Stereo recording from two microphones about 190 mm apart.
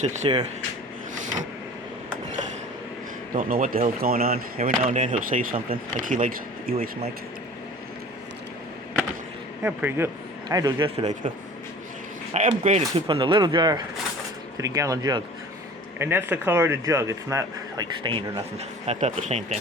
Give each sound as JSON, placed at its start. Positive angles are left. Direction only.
{"t": 0.2, "sound": "speech", "side_deg": -25}
{"t": 3.3, "sound": "speech", "side_deg": -50}
{"t": 4.8, "sound": "speech", "side_deg": -40}
{"t": 9.6, "sound": "speech", "side_deg": -10}
{"t": 10.5, "sound": "speech", "side_deg": -20}
{"t": 12.3, "sound": "speech", "side_deg": -35}
{"t": 18.9, "sound": "speech", "side_deg": -35}